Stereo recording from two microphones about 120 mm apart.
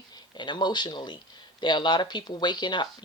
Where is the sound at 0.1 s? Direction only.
35° left (ahead or behind).